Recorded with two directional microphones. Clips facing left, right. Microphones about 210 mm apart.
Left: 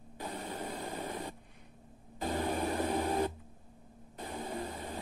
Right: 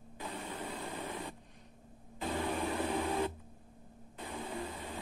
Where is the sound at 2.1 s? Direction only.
40° left (ahead or behind).